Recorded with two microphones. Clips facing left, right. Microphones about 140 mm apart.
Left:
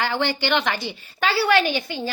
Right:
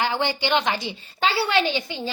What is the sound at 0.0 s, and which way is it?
A woman's voice, 15° right (ahead or behind).